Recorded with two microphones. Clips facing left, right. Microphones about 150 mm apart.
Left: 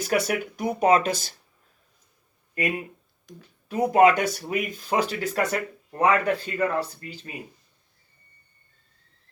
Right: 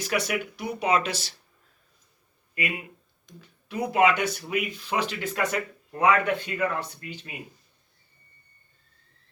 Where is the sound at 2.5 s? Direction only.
40° left (ahead or behind).